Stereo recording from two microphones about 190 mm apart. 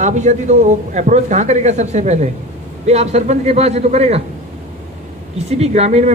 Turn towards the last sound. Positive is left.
turn(degrees=-35)  # may be behind; listen again after turning